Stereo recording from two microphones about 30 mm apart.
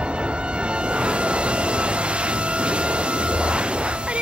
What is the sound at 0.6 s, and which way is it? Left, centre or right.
Music, right.